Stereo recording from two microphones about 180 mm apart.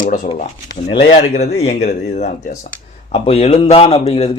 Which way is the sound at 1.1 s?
40° left (ahead or behind).